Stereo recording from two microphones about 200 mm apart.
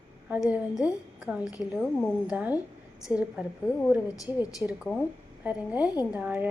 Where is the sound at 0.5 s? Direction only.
5° right (ahead or behind).